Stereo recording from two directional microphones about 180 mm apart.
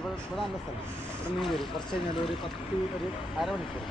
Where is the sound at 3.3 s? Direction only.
5° right (ahead or behind).